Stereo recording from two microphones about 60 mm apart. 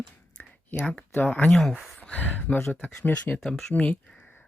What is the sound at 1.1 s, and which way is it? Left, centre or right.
Speech, left.